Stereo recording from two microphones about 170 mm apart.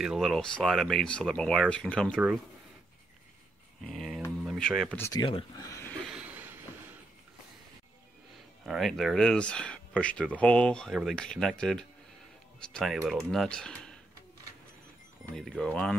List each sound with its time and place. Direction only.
0.0 s speech: centre (ahead or behind)
2.1 s speech: 5° right (ahead or behind)
3.8 s speech: centre (ahead or behind)
5.2 s speech: 30° left (ahead or behind)
5.7 s a sound: 15° left (ahead or behind)
6.0 s a sound: 5° right (ahead or behind)
8.6 s speech: centre (ahead or behind)
15.3 s speech: 5° left (ahead or behind)